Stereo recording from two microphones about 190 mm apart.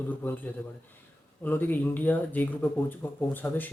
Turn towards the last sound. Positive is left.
turn(degrees=10)  # may be behind; listen again after turning